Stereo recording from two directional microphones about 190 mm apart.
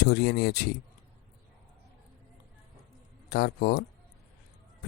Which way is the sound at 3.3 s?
60° left (ahead or behind).